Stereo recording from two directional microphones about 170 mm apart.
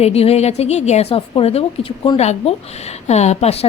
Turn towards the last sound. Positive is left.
turn(degrees=40)  # may be behind; listen again after turning